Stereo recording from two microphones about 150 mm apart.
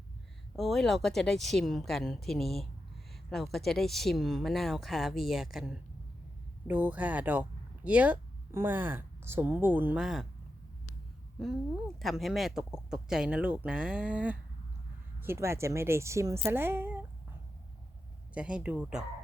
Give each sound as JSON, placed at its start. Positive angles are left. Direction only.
{"t": 0.5, "sound": "a woman's voice", "side_deg": 0}
{"t": 11.9, "sound": "a woman's voice", "side_deg": 0}
{"t": 18.3, "sound": "a woman's voice", "side_deg": -5}